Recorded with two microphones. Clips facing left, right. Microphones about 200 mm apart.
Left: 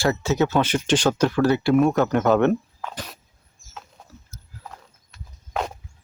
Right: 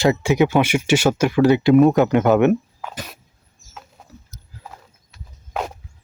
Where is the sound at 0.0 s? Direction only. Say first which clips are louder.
Right 4 dB; 15° right (ahead or behind).